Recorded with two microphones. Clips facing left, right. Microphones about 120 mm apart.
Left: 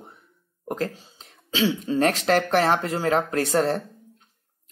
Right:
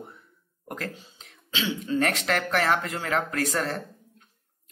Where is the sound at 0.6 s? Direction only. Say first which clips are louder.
Left 7 dB; 30° left (ahead or behind).